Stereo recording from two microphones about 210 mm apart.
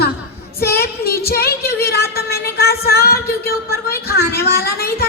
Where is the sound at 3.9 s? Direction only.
50° left (ahead or behind).